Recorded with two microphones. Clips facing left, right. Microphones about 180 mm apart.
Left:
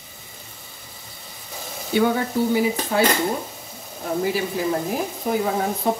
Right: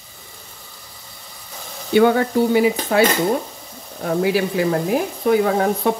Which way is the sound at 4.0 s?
75° right (ahead or behind).